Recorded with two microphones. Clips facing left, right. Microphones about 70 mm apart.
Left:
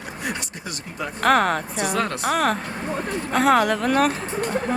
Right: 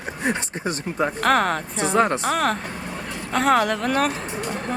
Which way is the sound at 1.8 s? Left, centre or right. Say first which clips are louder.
Right 7 dB; right.